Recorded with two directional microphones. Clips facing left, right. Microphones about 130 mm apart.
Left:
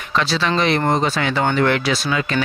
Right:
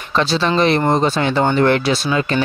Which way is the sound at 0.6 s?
35° right (ahead or behind).